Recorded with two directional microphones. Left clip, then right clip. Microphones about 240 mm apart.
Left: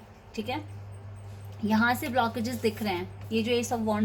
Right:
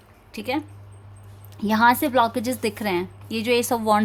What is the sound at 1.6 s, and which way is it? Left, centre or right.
A woman's voice, right.